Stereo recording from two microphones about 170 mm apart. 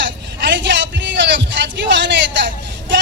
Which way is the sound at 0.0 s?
90° right.